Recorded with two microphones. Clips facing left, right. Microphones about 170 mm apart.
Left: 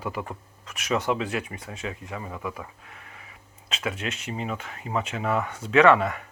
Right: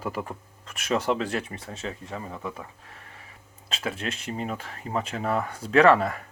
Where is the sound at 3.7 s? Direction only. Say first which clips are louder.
Even; 35° right (ahead or behind).